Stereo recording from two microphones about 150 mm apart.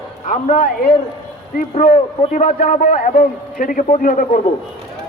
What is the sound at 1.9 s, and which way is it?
A man's voice, 55° left (ahead or behind).